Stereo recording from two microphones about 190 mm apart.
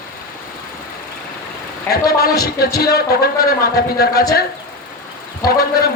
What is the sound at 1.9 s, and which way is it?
Speech, 55° left (ahead or behind).